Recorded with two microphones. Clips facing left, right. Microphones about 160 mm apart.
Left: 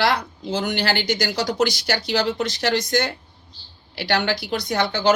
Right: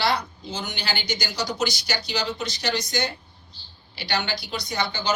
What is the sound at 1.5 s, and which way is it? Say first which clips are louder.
Speech: left 6 dB; 65° left (ahead or behind).